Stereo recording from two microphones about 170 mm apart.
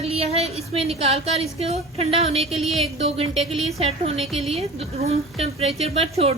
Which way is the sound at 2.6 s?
Centre (ahead or behind).